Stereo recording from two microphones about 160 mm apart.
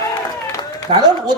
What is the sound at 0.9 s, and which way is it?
Speech, 40° right (ahead or behind).